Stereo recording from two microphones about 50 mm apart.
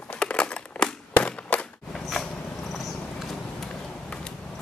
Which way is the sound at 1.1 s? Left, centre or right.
Left.